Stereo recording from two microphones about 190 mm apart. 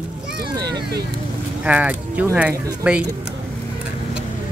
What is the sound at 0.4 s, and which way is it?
Vehicle, 60° right (ahead or behind).